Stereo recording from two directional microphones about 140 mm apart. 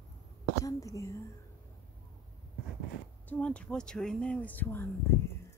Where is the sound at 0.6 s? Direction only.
25° left (ahead or behind).